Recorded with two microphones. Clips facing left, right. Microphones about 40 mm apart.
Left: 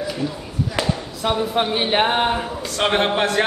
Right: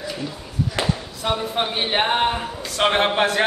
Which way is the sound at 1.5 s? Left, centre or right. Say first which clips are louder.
Left 3 dB; centre.